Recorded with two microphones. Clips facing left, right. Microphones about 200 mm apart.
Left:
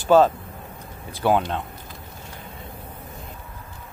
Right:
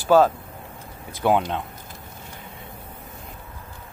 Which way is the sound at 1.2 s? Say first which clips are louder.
Even; 15° right (ahead or behind).